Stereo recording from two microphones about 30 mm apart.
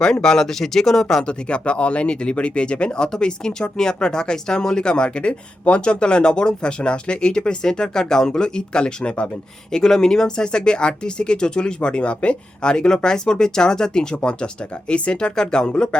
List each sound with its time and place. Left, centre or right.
0.0 s speech: left
1.2 s speech: left
9.7 s speech: centre